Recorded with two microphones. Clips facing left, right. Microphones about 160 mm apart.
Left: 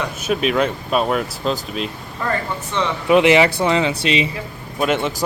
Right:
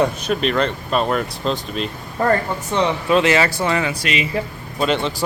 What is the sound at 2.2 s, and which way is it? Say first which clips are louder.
Speech: right 6 dB; 45° right (ahead or behind).